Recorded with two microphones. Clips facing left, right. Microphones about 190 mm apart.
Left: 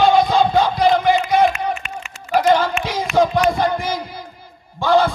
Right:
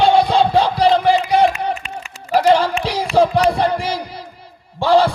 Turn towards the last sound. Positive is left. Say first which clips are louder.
# right 2 dB
turn(degrees=-30)  # may be behind; listen again after turning